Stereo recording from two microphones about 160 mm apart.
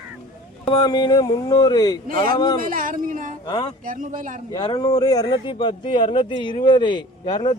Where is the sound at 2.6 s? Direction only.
60° right (ahead or behind).